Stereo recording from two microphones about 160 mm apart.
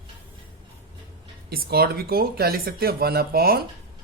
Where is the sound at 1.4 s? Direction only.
75° right (ahead or behind).